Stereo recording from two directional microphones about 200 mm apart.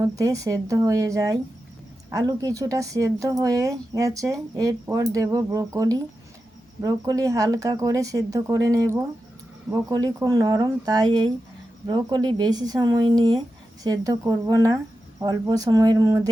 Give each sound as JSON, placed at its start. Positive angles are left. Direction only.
{"t": 0.2, "sound": "speech", "side_deg": -15}